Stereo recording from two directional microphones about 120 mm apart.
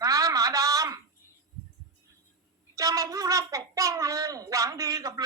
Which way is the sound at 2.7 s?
30° right (ahead or behind).